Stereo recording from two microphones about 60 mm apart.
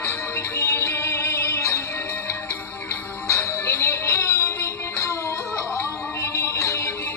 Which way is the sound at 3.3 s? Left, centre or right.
Left.